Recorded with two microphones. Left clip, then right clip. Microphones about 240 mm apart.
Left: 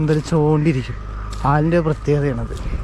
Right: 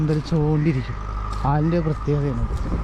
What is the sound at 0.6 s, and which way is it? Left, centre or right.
Speech, centre.